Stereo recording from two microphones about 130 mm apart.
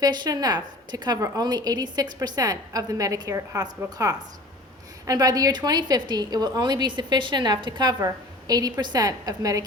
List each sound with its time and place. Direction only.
0.0 s a woman's voice: 30° right (ahead or behind)